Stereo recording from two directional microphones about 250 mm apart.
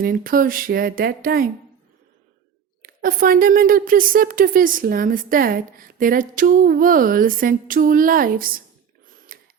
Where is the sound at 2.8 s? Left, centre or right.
Right.